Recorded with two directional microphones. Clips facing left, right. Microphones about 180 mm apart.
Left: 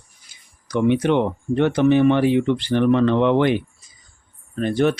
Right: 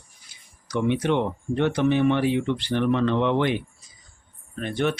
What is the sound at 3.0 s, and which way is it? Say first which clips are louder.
Speech: left 5 dB; 75° left (ahead or behind).